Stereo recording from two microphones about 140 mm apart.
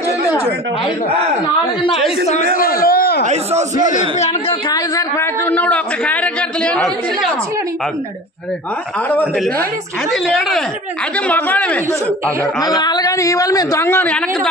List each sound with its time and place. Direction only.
1.8 s a man's voice: 40° left (ahead or behind)
2.6 s a sound: 90° left
4.2 s a woman's voice: 55° left (ahead or behind)
4.6 s a man's voice: 25° left (ahead or behind); by 7.2 s 5° left (ahead or behind)
10.1 s a man's voice: centre (ahead or behind)
12.5 s a man's voice: 30° left (ahead or behind); by 14.5 s 10° left (ahead or behind)